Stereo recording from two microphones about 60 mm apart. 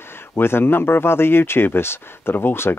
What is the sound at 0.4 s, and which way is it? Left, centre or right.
Speech, left.